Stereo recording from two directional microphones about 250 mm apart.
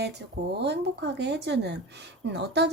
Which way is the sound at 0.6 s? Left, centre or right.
Right.